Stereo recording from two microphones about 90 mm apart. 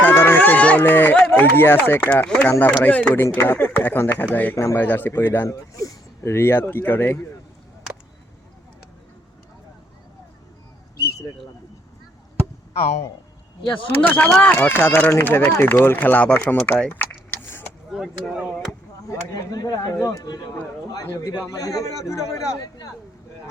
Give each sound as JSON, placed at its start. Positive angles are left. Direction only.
{"t": 0.0, "sound": "run", "side_deg": 25}
{"t": 2.0, "sound": "speech", "side_deg": 10}
{"t": 4.5, "sound": "a man's voice", "side_deg": 30}
{"t": 5.5, "sound": "speech", "side_deg": 40}
{"t": 13.7, "sound": "speech", "side_deg": 15}
{"t": 16.9, "sound": "vehicle", "side_deg": 25}
{"t": 17.9, "sound": "speech", "side_deg": -5}
{"t": 19.0, "sound": "speech", "side_deg": 40}
{"t": 20.9, "sound": "a man's voice", "side_deg": 40}